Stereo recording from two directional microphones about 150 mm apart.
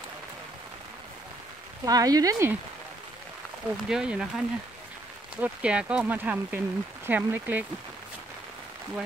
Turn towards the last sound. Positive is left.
turn(degrees=-10)  # may be behind; listen again after turning